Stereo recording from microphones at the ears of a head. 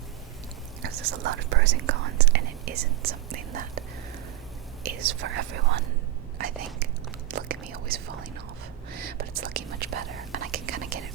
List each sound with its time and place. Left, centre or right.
0.8 s speech: right
7.3 s speech: right